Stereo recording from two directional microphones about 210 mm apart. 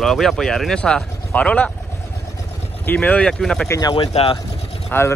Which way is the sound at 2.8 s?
10° left (ahead or behind).